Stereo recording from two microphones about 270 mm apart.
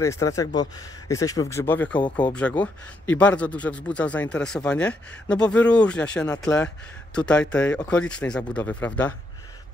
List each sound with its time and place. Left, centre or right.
0.0 s a man's voice: centre